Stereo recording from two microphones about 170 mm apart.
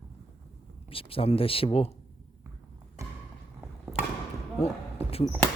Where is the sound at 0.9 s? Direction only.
35° left (ahead or behind).